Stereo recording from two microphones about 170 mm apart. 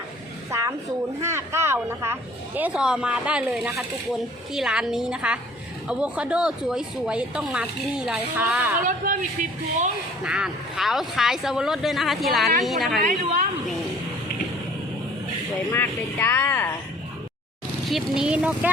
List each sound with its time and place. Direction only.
1.2 s a woman's voice: 15° right (ahead or behind)
8.9 s a man's voice: 50° right (ahead or behind)
10.2 s speech: 5° right (ahead or behind)
15.7 s speech: 10° left (ahead or behind)
17.8 s speech: centre (ahead or behind)